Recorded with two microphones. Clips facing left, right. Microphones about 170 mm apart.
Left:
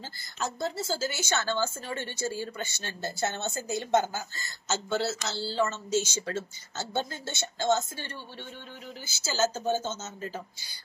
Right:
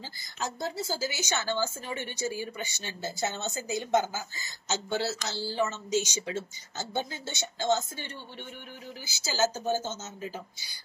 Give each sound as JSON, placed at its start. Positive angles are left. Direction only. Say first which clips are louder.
{"t": 0.2, "sound": "a woman's voice", "louder": "left 2 dB", "side_deg": -15}
{"t": 9.0, "sound": "a woman's voice", "louder": "even", "side_deg": -20}